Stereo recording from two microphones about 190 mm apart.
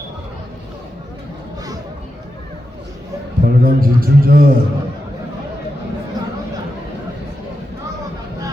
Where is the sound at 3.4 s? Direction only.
50° right (ahead or behind).